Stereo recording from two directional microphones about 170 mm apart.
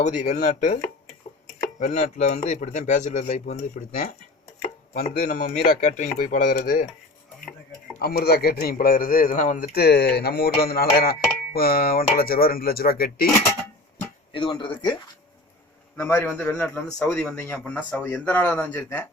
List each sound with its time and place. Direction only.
0.0 s speech: 45° left (ahead or behind)
5.1 s speech: 50° left (ahead or behind)
7.9 s speech: 60° left (ahead or behind)
14.3 s speech: 25° left (ahead or behind)
16.0 s a man's voice: 15° left (ahead or behind)